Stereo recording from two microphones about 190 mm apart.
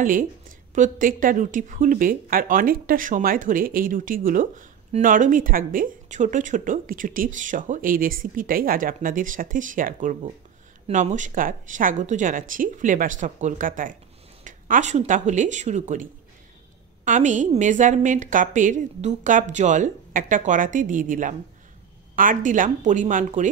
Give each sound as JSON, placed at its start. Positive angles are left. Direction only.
{"t": 0.0, "sound": "a woman's voice", "side_deg": -45}